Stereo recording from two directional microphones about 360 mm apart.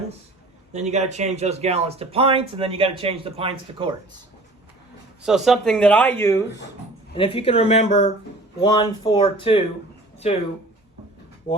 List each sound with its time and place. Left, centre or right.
0.7 s speech: centre
5.2 s speech: centre